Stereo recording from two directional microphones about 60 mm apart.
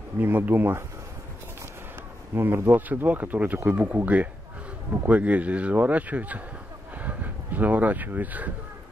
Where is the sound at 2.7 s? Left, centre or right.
Right.